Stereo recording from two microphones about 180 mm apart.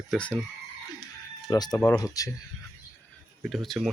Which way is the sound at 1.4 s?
20° left (ahead or behind).